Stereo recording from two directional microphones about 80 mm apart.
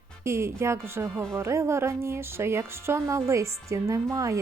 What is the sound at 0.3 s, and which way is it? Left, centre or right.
A woman's voice, right.